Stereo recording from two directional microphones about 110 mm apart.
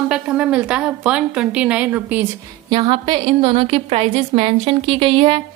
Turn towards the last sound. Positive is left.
turn(degrees=-55)  # may be behind; listen again after turning